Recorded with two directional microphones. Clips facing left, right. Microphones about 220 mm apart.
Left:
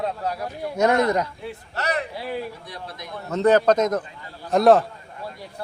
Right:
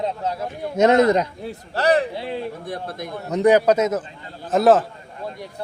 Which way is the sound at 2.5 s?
50° right (ahead or behind).